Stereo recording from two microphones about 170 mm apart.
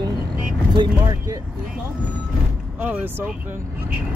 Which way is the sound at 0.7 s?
20° right (ahead or behind).